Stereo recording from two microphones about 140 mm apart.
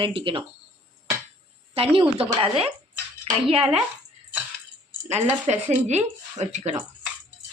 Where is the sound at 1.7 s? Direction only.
40° right (ahead or behind).